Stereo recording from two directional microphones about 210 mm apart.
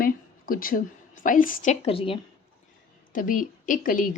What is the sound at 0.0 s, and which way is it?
A woman's voice, 45° left (ahead or behind).